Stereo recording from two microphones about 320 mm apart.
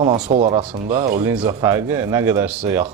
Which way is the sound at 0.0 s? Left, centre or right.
Centre.